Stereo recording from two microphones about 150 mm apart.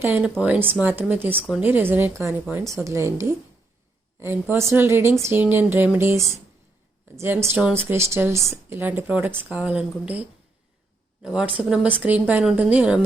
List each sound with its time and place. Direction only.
0.0 s a woman's voice: 15° right (ahead or behind)
1.4 s speech: centre (ahead or behind)
1.6 s a woman's voice: 15° right (ahead or behind)